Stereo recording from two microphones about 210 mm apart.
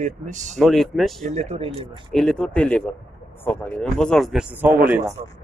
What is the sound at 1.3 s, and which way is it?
Speech, 30° right (ahead or behind).